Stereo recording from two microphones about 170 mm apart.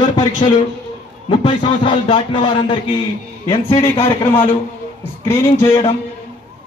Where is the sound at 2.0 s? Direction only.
30° left (ahead or behind).